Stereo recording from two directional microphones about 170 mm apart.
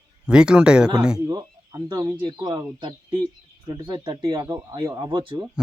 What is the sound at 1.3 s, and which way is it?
Speech, 25° right (ahead or behind).